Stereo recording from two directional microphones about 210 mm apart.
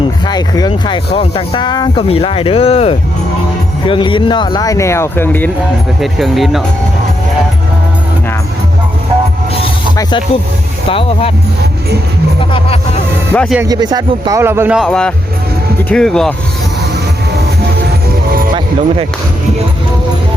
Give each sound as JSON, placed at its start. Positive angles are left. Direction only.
{"t": 0.3, "sound": "speech", "side_deg": 20}
{"t": 10.8, "sound": "speech", "side_deg": 25}
{"t": 12.4, "sound": "speech", "side_deg": 25}
{"t": 13.3, "sound": "speech", "side_deg": 5}
{"t": 13.6, "sound": "a man's voice", "side_deg": -20}
{"t": 18.3, "sound": "music", "side_deg": -45}